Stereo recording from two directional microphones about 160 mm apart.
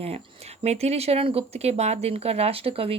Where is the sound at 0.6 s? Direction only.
40° right (ahead or behind).